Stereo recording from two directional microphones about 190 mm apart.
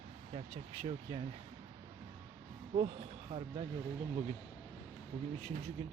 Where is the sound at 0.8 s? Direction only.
25° right (ahead or behind).